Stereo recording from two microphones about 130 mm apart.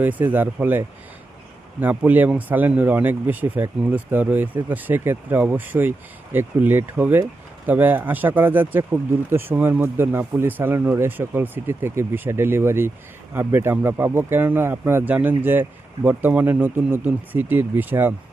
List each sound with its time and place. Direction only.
0.0 s speech: 10° right (ahead or behind)